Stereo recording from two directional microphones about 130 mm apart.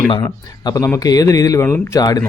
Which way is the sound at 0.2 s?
30° left (ahead or behind).